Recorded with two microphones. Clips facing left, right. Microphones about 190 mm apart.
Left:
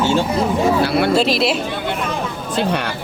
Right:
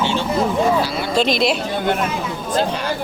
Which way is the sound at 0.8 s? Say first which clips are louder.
Left 6 dB; 60° left (ahead or behind).